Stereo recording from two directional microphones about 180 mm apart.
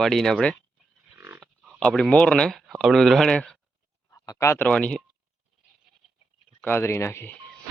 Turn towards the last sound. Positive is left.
turn(degrees=15)  # may be behind; listen again after turning